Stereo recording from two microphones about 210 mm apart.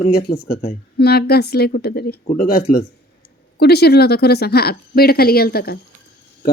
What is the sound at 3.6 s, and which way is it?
Speech, 50° left (ahead or behind).